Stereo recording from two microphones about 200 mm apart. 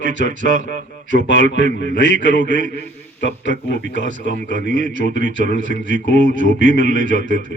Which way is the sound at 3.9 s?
40° right (ahead or behind).